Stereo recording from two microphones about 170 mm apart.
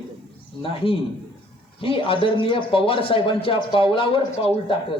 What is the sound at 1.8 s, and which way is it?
A man's voice, 30° left (ahead or behind).